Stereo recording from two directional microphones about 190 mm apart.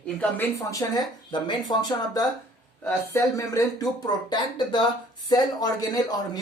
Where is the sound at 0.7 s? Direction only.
20° left (ahead or behind).